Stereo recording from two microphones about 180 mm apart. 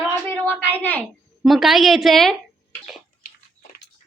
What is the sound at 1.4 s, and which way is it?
Speech, centre (ahead or behind).